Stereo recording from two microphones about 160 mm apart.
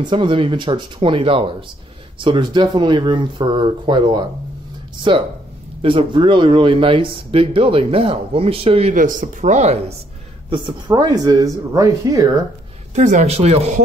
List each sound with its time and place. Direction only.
0.0 s speech: 30° right (ahead or behind)
5.8 s speech: 35° right (ahead or behind)
8.9 s speech: 55° right (ahead or behind)
10.5 s speech: 30° right (ahead or behind)
12.9 s speech: 50° right (ahead or behind)